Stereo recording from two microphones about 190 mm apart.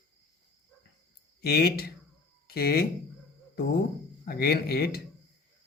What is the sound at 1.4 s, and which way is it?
Speech, 55° left (ahead or behind).